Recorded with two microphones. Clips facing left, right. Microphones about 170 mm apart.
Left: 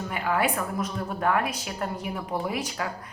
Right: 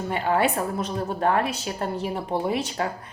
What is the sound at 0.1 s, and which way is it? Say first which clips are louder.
A woman's voice: right 4 dB; 30° right (ahead or behind).